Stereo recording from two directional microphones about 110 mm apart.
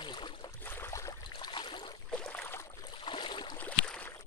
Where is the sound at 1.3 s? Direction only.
45° left (ahead or behind).